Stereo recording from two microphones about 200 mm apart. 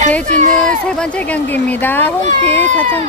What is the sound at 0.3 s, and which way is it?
Speech, 35° right (ahead or behind).